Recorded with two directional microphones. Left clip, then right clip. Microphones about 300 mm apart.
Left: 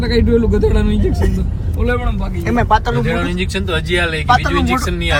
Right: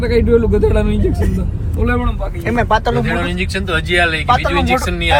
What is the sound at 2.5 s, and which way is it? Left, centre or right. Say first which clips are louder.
Speech: even; centre.